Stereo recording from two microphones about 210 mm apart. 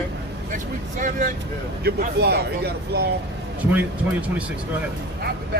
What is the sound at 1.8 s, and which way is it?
Speech, 50° right (ahead or behind).